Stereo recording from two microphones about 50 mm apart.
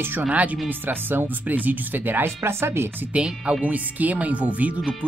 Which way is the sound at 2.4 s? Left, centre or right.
Right.